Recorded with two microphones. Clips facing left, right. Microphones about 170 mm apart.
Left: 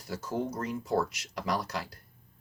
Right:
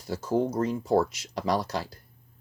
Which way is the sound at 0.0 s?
20° right (ahead or behind).